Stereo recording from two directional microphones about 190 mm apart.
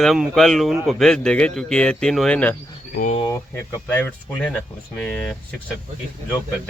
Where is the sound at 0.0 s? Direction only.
Centre (ahead or behind).